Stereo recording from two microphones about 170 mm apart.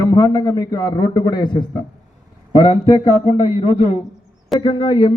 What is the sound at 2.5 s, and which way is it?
Speech, 30° left (ahead or behind).